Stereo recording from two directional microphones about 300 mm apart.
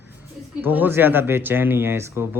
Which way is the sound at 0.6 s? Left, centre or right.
Centre.